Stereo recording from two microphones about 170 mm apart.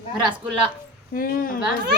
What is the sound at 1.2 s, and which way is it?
Speech, 55° left (ahead or behind).